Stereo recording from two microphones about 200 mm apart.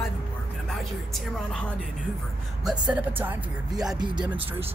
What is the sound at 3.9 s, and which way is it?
Speech, 20° right (ahead or behind).